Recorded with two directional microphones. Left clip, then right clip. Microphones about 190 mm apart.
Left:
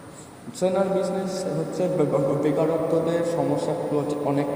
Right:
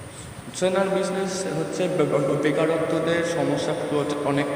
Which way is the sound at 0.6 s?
15° right (ahead or behind).